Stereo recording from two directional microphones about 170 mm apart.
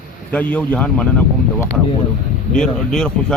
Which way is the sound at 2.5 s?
5° left (ahead or behind).